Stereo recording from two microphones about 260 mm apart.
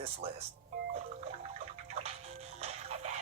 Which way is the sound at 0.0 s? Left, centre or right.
Right.